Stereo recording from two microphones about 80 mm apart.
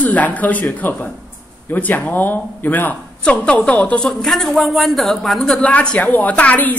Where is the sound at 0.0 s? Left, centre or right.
Centre.